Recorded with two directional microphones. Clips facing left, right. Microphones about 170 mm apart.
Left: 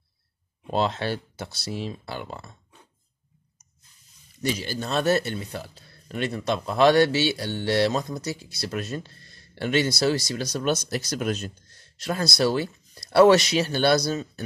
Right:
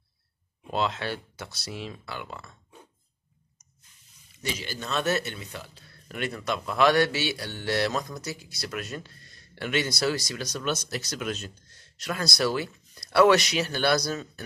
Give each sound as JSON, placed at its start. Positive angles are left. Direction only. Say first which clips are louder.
{"t": 0.7, "sound": "speech", "louder": "left 4 dB", "side_deg": 35}
{"t": 4.4, "sound": "speech", "louder": "left 6 dB", "side_deg": 35}
{"t": 12.0, "sound": "speech", "louder": "left 4 dB", "side_deg": 30}